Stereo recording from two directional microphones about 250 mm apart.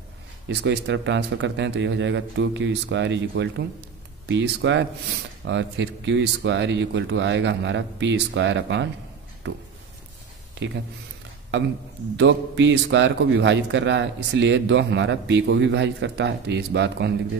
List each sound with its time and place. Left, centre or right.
0.5 s a man's voice: right
12.2 s a man's voice: right